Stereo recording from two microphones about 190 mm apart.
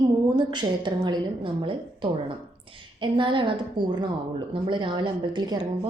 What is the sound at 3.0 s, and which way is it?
Speech, 25° right (ahead or behind).